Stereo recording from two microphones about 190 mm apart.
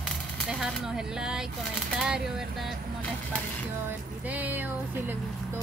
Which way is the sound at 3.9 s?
10° right (ahead or behind).